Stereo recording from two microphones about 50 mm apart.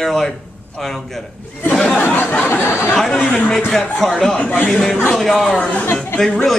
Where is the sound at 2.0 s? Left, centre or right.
Left.